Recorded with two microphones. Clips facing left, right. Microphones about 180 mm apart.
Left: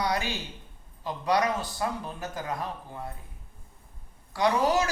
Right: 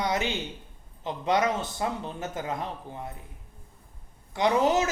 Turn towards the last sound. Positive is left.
turn(degrees=-20)  # may be behind; listen again after turning